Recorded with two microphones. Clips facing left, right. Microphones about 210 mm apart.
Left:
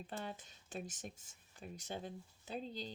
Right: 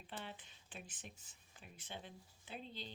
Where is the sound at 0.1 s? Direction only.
40° left (ahead or behind).